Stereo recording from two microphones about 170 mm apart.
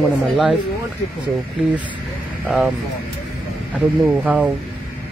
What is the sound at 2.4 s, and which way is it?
Speech, 5° right (ahead or behind).